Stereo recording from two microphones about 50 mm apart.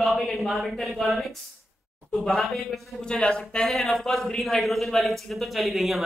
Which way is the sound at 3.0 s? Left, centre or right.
Centre.